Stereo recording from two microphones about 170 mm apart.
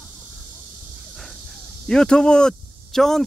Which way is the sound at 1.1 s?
Centre (ahead or behind).